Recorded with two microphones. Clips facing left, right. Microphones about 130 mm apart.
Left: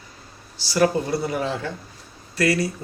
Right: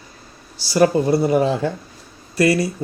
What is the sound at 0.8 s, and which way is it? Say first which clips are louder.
Speech: right 5 dB; 35° right (ahead or behind).